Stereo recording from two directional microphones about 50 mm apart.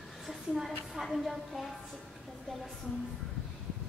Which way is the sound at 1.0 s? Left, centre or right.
Centre.